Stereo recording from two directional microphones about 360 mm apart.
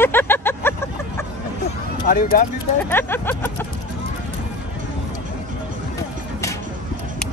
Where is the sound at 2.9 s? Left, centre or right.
Centre.